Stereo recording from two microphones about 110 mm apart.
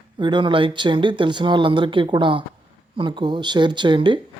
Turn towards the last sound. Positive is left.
turn(degrees=-50)  # may be behind; listen again after turning